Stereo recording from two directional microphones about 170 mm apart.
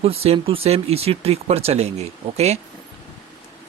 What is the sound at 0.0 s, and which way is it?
Speech, 35° right (ahead or behind).